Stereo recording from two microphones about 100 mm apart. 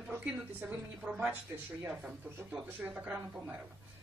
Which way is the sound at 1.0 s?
10° right (ahead or behind).